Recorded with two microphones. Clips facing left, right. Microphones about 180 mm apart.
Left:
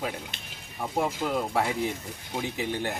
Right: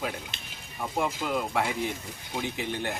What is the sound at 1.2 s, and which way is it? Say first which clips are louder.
Speech: left 1 dB; 20° left (ahead or behind).